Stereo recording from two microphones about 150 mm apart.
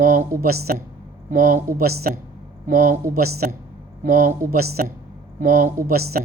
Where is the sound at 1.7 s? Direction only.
90° right.